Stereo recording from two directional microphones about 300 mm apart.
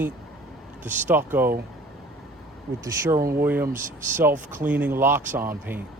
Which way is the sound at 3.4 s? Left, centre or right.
Centre.